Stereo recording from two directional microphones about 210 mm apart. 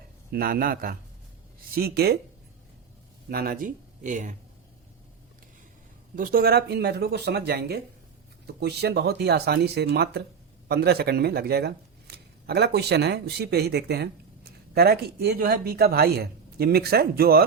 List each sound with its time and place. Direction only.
0.3 s speech: 45° right (ahead or behind)
3.2 s speech: 45° right (ahead or behind)
6.1 s speech: 45° right (ahead or behind)